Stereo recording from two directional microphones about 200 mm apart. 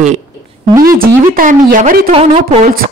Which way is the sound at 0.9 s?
45° right (ahead or behind).